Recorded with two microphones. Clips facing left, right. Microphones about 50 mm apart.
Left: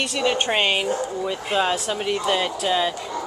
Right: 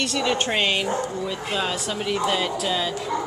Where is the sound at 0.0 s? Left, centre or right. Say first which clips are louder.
Left 1 dB; centre.